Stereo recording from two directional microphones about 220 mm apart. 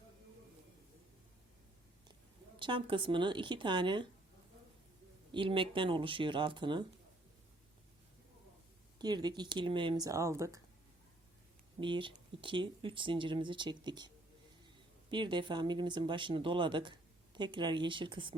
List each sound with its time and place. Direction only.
2.6 s speech: 20° right (ahead or behind)
5.3 s speech: 25° right (ahead or behind)
9.0 s speech: 20° right (ahead or behind)
11.8 s speech: 20° right (ahead or behind)
15.1 s speech: 20° right (ahead or behind)